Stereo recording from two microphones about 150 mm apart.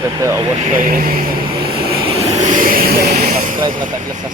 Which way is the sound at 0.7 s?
70° right (ahead or behind).